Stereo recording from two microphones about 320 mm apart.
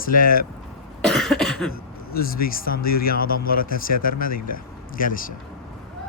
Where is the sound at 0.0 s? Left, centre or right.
Left.